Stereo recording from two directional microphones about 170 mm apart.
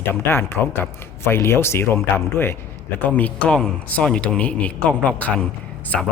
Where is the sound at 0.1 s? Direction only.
15° left (ahead or behind).